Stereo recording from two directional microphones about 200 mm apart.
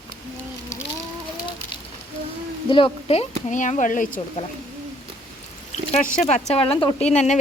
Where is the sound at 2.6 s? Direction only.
25° left (ahead or behind).